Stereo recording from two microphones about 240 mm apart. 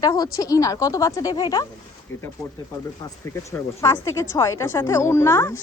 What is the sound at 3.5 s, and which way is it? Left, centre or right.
A woman's voice, centre.